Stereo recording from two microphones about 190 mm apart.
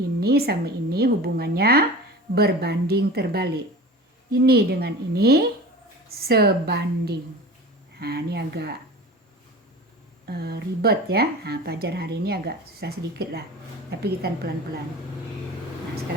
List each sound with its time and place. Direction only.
0.2 s speech: 55° right (ahead or behind)
10.2 s speech: 55° right (ahead or behind)